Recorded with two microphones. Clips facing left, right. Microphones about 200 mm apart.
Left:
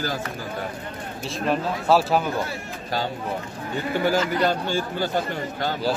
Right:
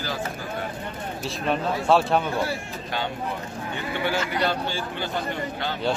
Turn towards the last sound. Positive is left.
turn(degrees=40)  # may be behind; listen again after turning